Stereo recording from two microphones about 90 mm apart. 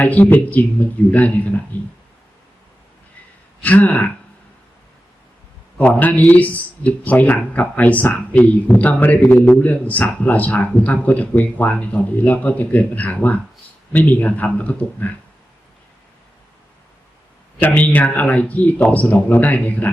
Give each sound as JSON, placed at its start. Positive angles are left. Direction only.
{"t": 0.0, "sound": "a man's voice", "side_deg": 20}
{"t": 3.6, "sound": "a man's voice", "side_deg": 15}
{"t": 5.7, "sound": "a man's voice", "side_deg": 15}
{"t": 17.6, "sound": "a man's voice", "side_deg": 15}